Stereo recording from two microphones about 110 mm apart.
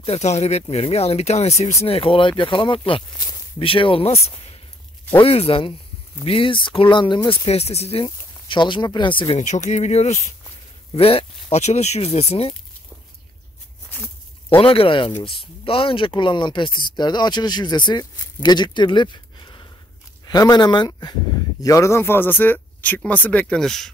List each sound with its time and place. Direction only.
0.0 s speech: 80° left
1.8 s speech: 60° left (ahead or behind)
7.2 s speech: 70° left (ahead or behind)
8.0 s speech: 45° left (ahead or behind)
9.4 s speech: 90° left
11.0 s speech: 60° left (ahead or behind)
13.8 s a sound: 15° left (ahead or behind)
14.6 s speech: 55° left (ahead or behind); by 23.9 s 5° left (ahead or behind)